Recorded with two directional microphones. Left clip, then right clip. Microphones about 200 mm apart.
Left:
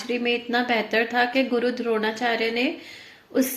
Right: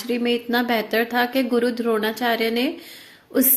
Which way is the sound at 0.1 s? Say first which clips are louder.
Right 2 dB; 35° right (ahead or behind).